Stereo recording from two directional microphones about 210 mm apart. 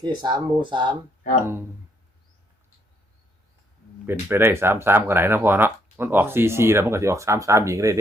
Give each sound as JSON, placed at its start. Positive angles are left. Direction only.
{"t": 0.0, "sound": "speech", "side_deg": -20}
{"t": 4.0, "sound": "speech", "side_deg": -10}